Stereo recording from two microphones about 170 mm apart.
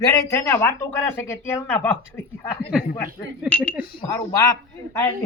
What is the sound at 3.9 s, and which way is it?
Speech, 25° left (ahead or behind).